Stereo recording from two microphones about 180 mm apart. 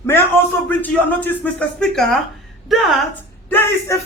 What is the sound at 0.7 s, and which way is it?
A woman's voice, 10° left (ahead or behind).